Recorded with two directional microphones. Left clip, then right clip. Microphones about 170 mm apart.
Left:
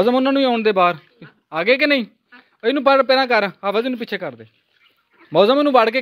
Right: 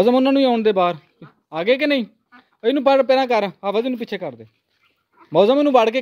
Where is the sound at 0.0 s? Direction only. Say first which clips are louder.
Right 1 dB; 25° right (ahead or behind).